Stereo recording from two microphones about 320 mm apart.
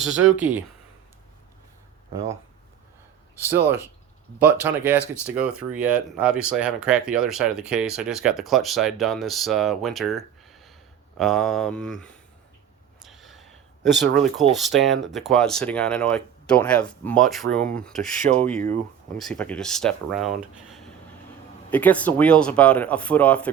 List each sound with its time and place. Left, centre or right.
0.0 s speech: centre
2.1 s speech: centre
13.0 s gasp: centre
14.5 s speech: centre
18.2 s speech: right
19.1 s speech: centre